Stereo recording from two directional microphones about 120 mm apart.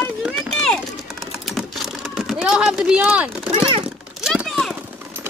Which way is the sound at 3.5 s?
50° right (ahead or behind).